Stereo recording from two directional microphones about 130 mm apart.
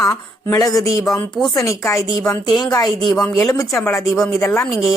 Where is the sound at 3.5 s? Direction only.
25° left (ahead or behind).